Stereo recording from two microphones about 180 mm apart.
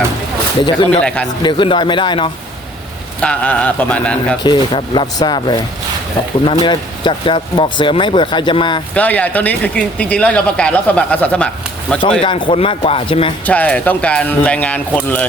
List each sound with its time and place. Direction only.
1.0 s a man's voice: 5° left (ahead or behind)
1.4 s speech: 25° left (ahead or behind)
3.2 s speech: 5° left (ahead or behind)
4.4 s speech: 25° left (ahead or behind)
9.0 s speech: 10° left (ahead or behind)
12.2 s a man's voice: 30° left (ahead or behind)
13.4 s speech: 10° left (ahead or behind)